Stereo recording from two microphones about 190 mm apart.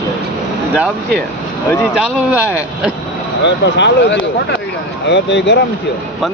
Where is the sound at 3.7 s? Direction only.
70° left (ahead or behind).